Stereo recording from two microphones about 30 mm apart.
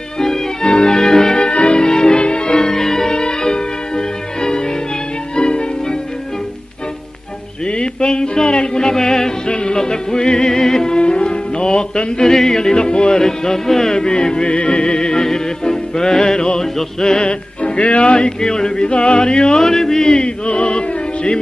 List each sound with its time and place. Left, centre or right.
0.2 s music: centre
1.5 s music: left
1.8 s music: left
2.5 s music: centre
3.1 s music: left
7.6 s a sound: left
8.8 s music: left
9.5 s music: left
11.0 s music: left
12.4 s music: centre
13.2 s music: centre
17.2 s music: left
18.1 s music: left
19.6 s music: centre; by 21.4 s left